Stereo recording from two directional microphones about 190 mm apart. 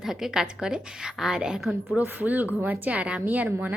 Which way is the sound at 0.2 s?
5° right (ahead or behind).